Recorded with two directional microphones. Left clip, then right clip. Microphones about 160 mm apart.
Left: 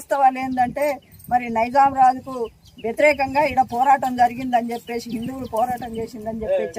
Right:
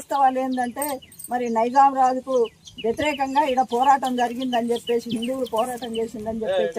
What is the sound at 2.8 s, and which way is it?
Speech, 25° left (ahead or behind).